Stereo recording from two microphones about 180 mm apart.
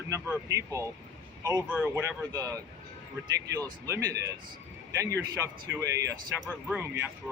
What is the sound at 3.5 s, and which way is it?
Speech, 15° right (ahead or behind).